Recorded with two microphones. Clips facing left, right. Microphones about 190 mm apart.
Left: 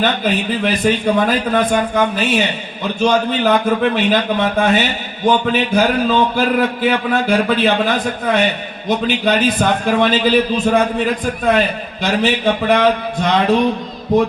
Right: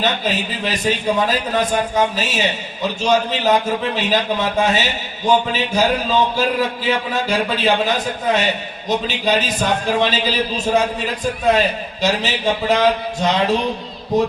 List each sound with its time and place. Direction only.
0.0 s a man's voice: 55° left (ahead or behind)